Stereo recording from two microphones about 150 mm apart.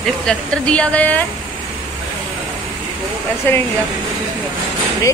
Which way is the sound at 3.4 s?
15° left (ahead or behind).